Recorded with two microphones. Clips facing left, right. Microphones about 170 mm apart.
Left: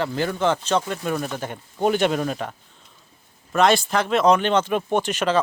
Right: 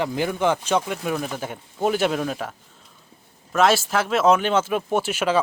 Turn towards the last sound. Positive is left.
turn(degrees=-10)  # may be behind; listen again after turning